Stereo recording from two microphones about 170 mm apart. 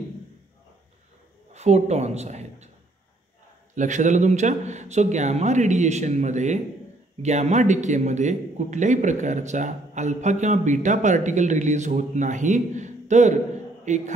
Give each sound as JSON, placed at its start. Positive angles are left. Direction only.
{"t": 1.5, "sound": "a woman's voice", "side_deg": -40}
{"t": 3.7, "sound": "a man's voice", "side_deg": -45}